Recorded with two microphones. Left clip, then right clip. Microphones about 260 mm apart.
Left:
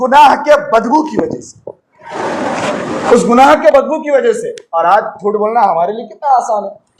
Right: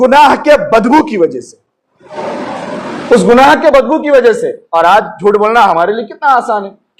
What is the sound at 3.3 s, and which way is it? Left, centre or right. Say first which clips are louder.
A man's voice: right 1 dB; right.